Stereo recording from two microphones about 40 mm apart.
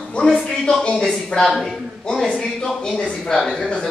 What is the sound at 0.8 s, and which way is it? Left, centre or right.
Speech, left.